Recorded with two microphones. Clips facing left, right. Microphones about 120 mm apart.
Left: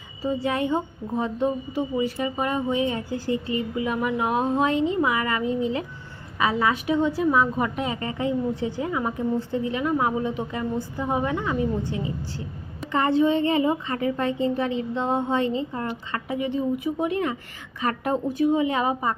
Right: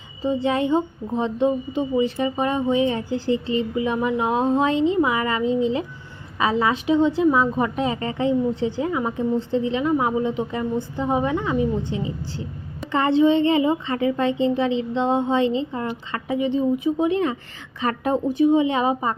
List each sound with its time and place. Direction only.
0.2 s a woman's voice: 25° right (ahead or behind)